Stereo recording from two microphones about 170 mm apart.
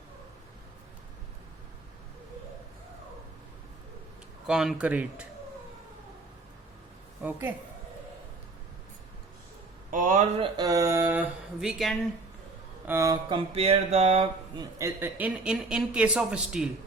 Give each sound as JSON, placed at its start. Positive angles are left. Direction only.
{"t": 4.4, "sound": "speech", "side_deg": -5}
{"t": 7.2, "sound": "speech", "side_deg": -10}
{"t": 9.9, "sound": "speech", "side_deg": -50}
{"t": 10.7, "sound": "speech", "side_deg": -20}
{"t": 12.9, "sound": "speech", "side_deg": -20}
{"t": 13.3, "sound": "a sound", "side_deg": -35}
{"t": 14.6, "sound": "speech", "side_deg": -15}